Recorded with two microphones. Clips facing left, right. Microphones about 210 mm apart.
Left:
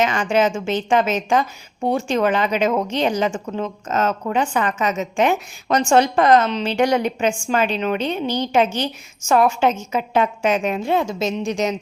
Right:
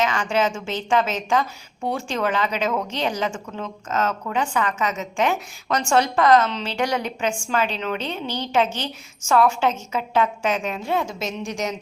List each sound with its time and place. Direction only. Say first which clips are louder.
0.0 s a woman's voice: left 4 dB; 20° left (ahead or behind)